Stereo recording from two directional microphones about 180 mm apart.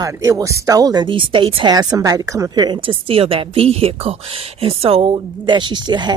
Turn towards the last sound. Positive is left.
turn(degrees=-25)  # may be behind; listen again after turning